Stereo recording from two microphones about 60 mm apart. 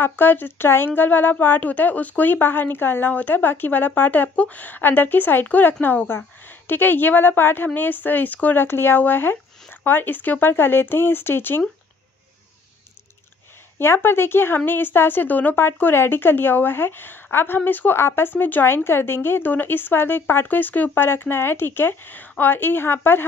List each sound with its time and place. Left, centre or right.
0.0 s speech: left
13.7 s speech: left